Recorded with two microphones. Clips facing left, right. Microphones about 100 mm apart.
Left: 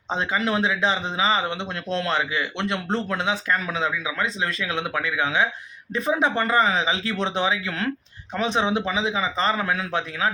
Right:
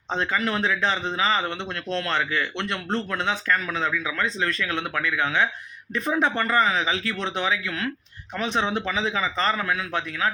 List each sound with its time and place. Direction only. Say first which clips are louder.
0.1 s speech: left 1 dB; 15° left (ahead or behind)